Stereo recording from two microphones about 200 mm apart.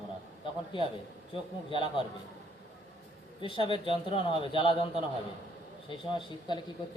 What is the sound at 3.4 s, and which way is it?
A man's voice, 25° left (ahead or behind).